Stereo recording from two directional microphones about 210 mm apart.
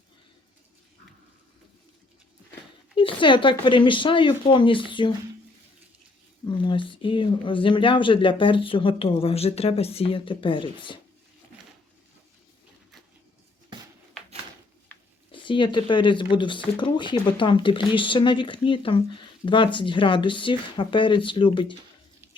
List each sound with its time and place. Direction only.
2.9 s speech: 25° left (ahead or behind)
6.4 s speech: 20° left (ahead or behind)
15.3 s speech: 25° left (ahead or behind)